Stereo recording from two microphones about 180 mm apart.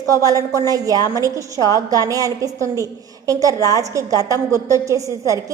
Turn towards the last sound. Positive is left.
turn(degrees=-15)  # may be behind; listen again after turning